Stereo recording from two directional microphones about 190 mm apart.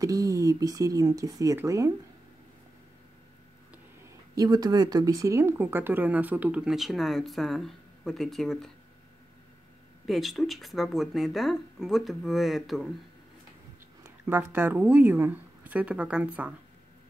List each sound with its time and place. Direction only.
0.0 s speech: 15° right (ahead or behind)
4.4 s speech: 20° right (ahead or behind); by 8.7 s centre (ahead or behind)
10.0 s speech: centre (ahead or behind)
14.0 s speech: 10° right (ahead or behind)